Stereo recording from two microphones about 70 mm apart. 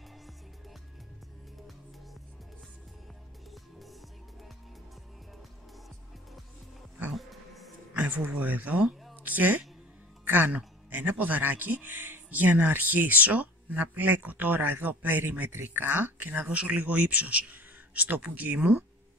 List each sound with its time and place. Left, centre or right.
7.2 s music: centre
7.9 s speech: right
9.2 s a sound: right
10.2 s speech: right